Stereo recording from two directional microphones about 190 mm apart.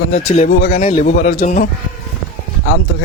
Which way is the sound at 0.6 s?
45° left (ahead or behind).